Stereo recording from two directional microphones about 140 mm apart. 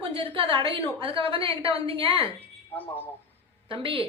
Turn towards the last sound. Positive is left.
turn(degrees=-40)  # may be behind; listen again after turning